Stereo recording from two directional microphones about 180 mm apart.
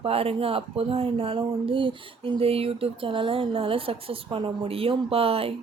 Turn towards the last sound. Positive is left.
turn(degrees=-30)  # may be behind; listen again after turning